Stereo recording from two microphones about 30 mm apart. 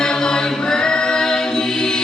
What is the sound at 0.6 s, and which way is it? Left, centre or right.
Choir, left.